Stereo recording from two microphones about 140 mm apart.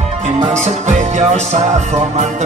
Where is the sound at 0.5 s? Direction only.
55° right (ahead or behind).